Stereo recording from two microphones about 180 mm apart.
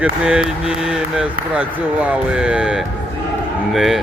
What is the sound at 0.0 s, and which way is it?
Speech, 5° right (ahead or behind).